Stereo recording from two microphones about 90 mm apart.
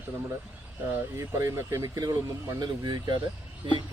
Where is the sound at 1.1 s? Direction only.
35° right (ahead or behind).